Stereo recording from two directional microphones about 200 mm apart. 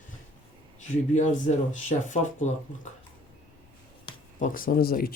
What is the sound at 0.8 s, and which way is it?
Speech, 35° left (ahead or behind).